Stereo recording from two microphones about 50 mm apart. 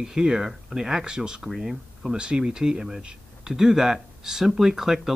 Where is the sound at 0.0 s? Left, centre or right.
Centre.